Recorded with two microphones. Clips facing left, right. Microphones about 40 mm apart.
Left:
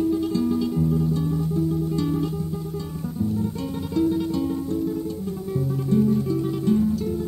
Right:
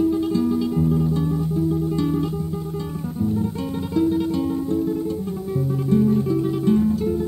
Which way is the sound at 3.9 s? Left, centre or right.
Centre.